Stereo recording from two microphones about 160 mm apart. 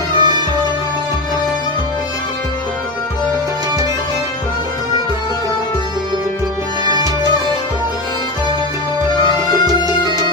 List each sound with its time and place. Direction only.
0.1 s music: 25° right (ahead or behind)
9.5 s music: 30° left (ahead or behind)